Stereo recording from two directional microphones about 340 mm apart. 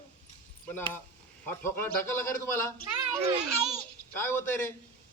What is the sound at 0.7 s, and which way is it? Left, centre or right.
A man's voice, centre.